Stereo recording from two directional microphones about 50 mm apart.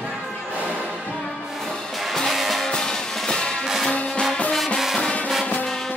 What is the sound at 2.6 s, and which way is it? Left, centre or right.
Music, centre.